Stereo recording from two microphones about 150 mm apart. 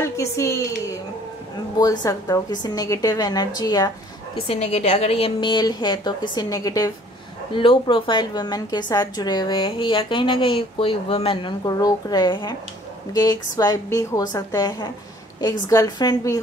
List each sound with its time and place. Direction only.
0.0 s a woman's voice: 20° left (ahead or behind)
4.4 s a woman's voice: 40° left (ahead or behind); by 16.3 s 25° left (ahead or behind)